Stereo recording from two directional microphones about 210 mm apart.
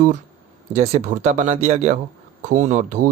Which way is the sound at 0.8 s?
35° right (ahead or behind).